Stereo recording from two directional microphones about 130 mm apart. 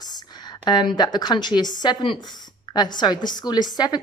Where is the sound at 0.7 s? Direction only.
35° left (ahead or behind).